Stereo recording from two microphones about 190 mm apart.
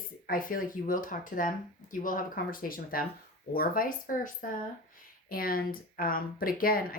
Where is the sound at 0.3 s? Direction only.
45° left (ahead or behind).